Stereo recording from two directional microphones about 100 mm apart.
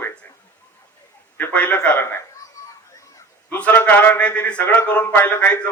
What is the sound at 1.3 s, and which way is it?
Speech, 15° left (ahead or behind).